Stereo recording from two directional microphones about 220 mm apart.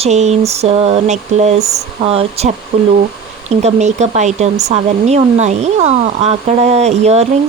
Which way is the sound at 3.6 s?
30° right (ahead or behind).